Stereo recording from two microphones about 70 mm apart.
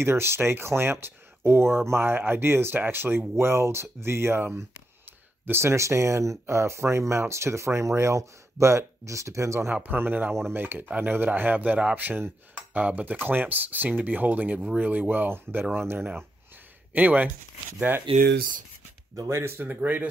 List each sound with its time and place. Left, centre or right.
0.0 s speech: right
9.8 s speech: right
16.9 s speech: right
19.2 s speech: right